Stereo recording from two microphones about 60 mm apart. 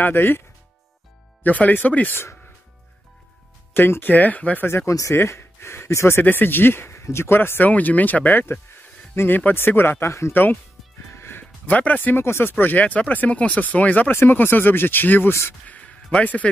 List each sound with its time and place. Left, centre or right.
0.0 s speech: left
1.4 s speech: left
3.7 s speech: left
4.1 s speech: left
4.8 s speech: left
5.1 s speech: left
6.2 s speech: left
6.9 s speech: left
10.3 s speech: left
11.1 s music: left
11.7 s speech: left
12.2 s speech: left
14.1 s speech: left
15.6 s music: left